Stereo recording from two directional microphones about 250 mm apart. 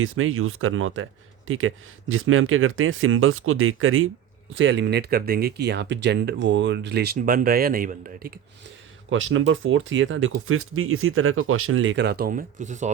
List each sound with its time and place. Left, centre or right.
0.0 s speech: right
9.0 s speech: right